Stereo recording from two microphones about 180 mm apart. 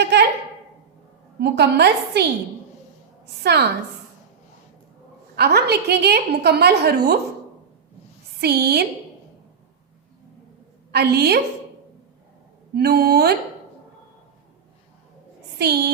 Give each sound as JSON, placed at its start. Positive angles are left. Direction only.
{"t": 0.0, "sound": "a sound", "side_deg": -65}
{"t": 1.4, "sound": "a woman's voice", "side_deg": -65}
{"t": 3.4, "sound": "a woman's voice", "side_deg": -65}
{"t": 5.4, "sound": "a woman's voice", "side_deg": -65}
{"t": 8.4, "sound": "a woman's voice", "side_deg": -65}
{"t": 10.9, "sound": "a woman's voice", "side_deg": -65}
{"t": 12.7, "sound": "a woman's voice", "side_deg": -60}
{"t": 15.5, "sound": "a woman's voice", "side_deg": -65}